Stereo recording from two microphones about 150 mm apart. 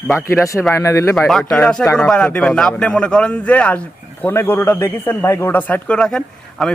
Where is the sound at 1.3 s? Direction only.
Centre (ahead or behind).